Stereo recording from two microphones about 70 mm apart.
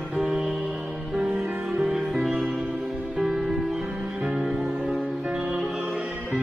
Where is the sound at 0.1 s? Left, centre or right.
Centre.